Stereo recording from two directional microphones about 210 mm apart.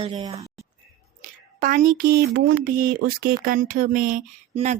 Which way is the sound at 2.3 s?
50° right (ahead or behind).